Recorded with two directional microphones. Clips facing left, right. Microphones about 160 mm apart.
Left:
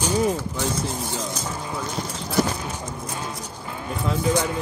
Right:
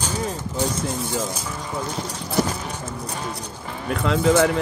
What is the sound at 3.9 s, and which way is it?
Speech, 85° right.